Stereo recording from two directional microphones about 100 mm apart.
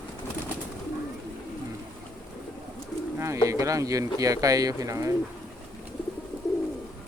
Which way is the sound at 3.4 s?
30° right (ahead or behind).